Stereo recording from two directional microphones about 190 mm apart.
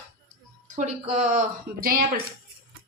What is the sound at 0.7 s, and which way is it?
A woman's voice, 40° right (ahead or behind).